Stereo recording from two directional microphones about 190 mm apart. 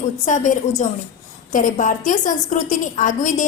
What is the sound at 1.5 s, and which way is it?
A woman's voice, 40° left (ahead or behind).